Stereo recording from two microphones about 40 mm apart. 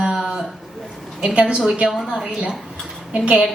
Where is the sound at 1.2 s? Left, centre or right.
Right.